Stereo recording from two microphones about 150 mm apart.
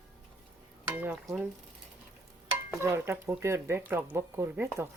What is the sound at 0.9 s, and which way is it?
Stir, 15° right (ahead or behind).